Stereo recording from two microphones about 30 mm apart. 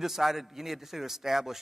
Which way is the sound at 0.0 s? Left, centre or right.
Centre.